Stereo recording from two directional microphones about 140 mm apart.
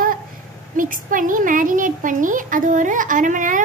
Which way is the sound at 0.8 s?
75° right (ahead or behind).